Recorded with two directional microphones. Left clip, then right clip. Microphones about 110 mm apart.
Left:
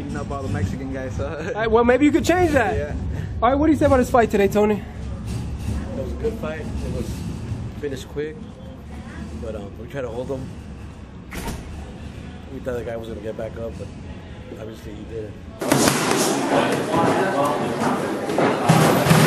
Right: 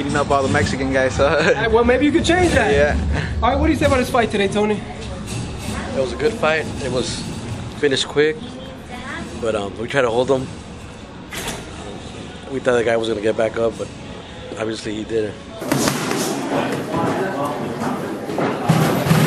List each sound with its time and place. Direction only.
0.1 s speech: 30° right (ahead or behind)
1.6 s a man's voice: 5° right (ahead or behind)
2.7 s speech: 25° right (ahead or behind)
3.4 s a man's voice: 5° right (ahead or behind)
6.0 s a man's voice: 35° right (ahead or behind)
7.8 s a man's voice: 30° right (ahead or behind)
9.5 s a man's voice: 30° right (ahead or behind)
12.6 s speech: 20° right (ahead or behind)
15.6 s a sound: centre (ahead or behind)